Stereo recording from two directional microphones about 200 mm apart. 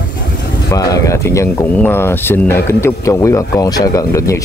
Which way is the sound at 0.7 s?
15° left (ahead or behind).